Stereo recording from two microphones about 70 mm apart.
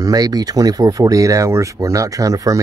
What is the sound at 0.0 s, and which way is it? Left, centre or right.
Speech, right.